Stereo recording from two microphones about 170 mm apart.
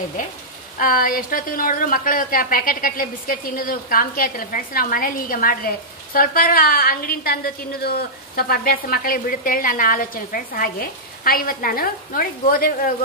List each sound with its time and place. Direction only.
0.7 s a woman's voice: 55° left (ahead or behind)